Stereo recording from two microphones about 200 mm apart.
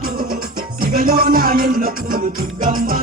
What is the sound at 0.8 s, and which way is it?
Music, 45° right (ahead or behind).